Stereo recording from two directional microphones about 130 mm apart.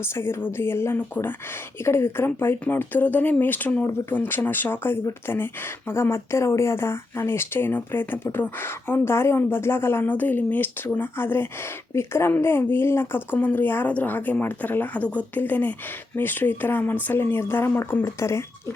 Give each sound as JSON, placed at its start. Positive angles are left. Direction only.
{"t": 0.0, "sound": "speech", "side_deg": 20}